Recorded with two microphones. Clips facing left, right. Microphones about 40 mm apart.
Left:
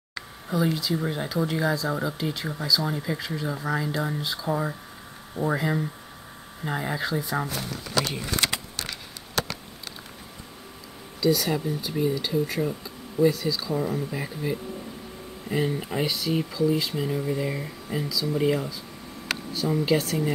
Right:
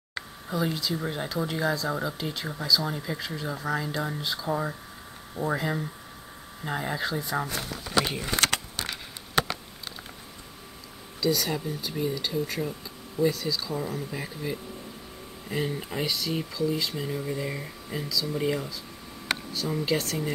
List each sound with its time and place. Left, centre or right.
0.5 s speech: centre
8.7 s a sound: right
11.1 s speech: centre